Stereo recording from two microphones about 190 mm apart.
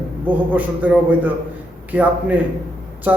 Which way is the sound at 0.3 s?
10° right (ahead or behind).